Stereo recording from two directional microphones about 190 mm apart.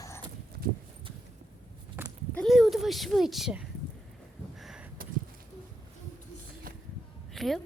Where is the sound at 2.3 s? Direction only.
Centre (ahead or behind).